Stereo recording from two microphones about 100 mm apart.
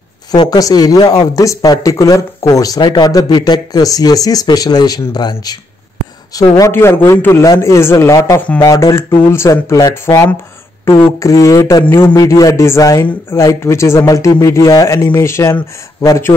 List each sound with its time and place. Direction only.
0.3 s speech: 40° left (ahead or behind)
6.7 s speech: 25° left (ahead or behind)
8.4 s speech: 20° left (ahead or behind)
8.6 s speech: 30° left (ahead or behind)
10.9 s a sound: 60° left (ahead or behind)
11.1 s speech: 35° left (ahead or behind)